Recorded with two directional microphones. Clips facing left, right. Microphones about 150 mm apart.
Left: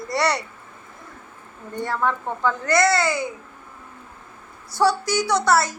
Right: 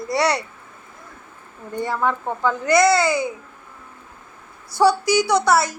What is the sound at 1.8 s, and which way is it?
Speech, 5° right (ahead or behind).